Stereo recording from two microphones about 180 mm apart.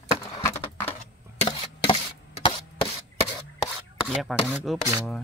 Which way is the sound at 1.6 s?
30° left (ahead or behind).